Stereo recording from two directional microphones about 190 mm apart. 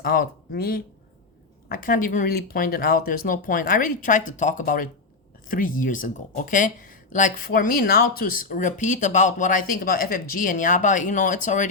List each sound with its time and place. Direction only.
0.0 s speech: 50° left (ahead or behind)